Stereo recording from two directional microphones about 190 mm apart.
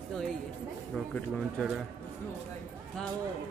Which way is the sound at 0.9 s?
Centre (ahead or behind).